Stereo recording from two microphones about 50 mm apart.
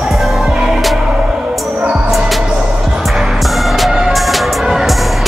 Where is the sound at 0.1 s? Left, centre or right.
Centre.